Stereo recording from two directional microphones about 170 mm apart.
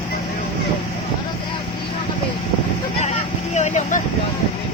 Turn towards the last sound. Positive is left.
turn(degrees=45)  # may be behind; listen again after turning